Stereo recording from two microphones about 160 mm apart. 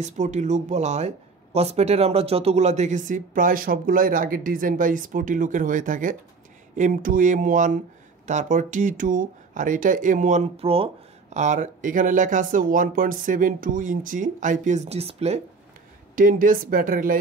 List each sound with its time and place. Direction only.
0.0 s speech: 45° right (ahead or behind)
11.3 s speech: 50° right (ahead or behind)
16.2 s speech: 60° right (ahead or behind)